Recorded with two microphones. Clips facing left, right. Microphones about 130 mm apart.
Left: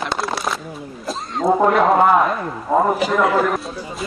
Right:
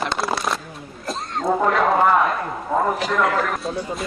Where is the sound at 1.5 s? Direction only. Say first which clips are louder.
Left 4 dB; 15° left (ahead or behind).